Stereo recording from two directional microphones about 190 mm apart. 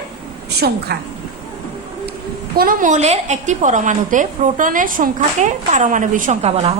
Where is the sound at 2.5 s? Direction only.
45° right (ahead or behind).